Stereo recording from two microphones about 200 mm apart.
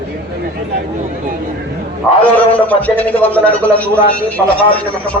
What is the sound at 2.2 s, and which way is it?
A man's voice, 5° left (ahead or behind).